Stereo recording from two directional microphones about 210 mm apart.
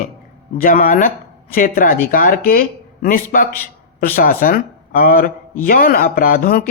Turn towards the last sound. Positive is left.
turn(degrees=45)  # may be behind; listen again after turning